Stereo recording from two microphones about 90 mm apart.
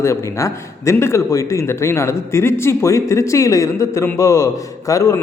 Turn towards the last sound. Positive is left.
turn(degrees=40)  # may be behind; listen again after turning